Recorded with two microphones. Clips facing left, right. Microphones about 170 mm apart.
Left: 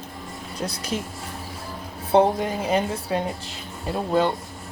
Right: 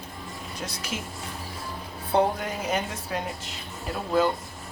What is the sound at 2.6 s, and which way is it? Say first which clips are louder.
A woman's voice: left 5 dB; 30° left (ahead or behind).